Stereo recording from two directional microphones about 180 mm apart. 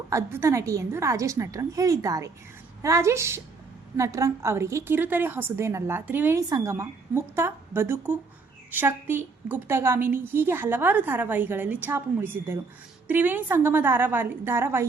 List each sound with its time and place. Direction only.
0.1 s a woman's voice: 15° right (ahead or behind)